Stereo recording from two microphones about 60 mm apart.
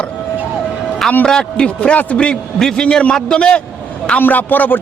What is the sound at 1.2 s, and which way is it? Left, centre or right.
A man's voice, centre.